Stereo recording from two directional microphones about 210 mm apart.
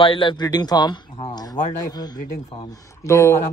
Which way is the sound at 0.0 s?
25° left (ahead or behind).